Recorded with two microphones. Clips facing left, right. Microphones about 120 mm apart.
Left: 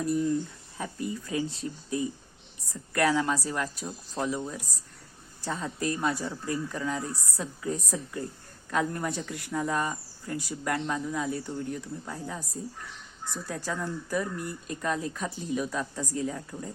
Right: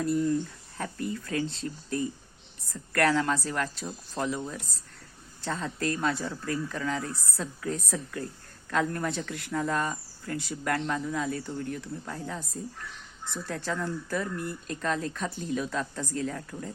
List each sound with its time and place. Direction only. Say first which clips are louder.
0.0 s speech: right 1 dB; 15° left (ahead or behind)
13.7 s speech: right 1 dB; 15° left (ahead or behind)